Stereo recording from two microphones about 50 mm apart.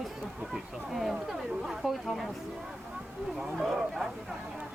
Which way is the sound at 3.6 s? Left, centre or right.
Centre.